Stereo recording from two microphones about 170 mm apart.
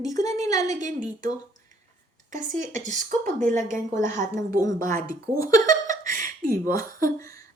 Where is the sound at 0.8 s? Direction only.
45° right (ahead or behind).